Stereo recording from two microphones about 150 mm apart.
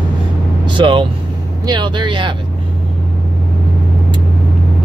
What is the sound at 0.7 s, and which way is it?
Speech, 30° right (ahead or behind).